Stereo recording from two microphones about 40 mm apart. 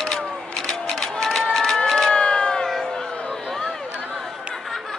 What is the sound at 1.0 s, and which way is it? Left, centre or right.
Run, centre.